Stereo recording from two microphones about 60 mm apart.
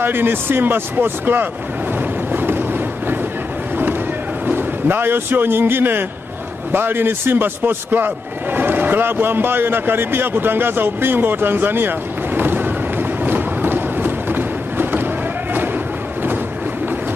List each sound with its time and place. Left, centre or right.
0.0 s a man's voice: right
2.3 s boat: right
4.5 s a man's voice: right
12.4 s a sound: right